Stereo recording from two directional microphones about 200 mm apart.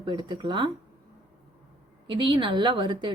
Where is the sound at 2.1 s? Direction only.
25° right (ahead or behind).